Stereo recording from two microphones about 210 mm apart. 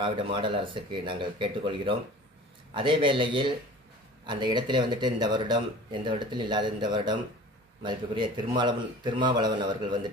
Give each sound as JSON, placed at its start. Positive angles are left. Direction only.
{"t": 0.0, "sound": "speech", "side_deg": -25}